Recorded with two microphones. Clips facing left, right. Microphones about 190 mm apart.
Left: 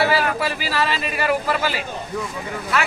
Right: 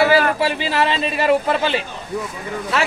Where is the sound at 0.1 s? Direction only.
25° right (ahead or behind).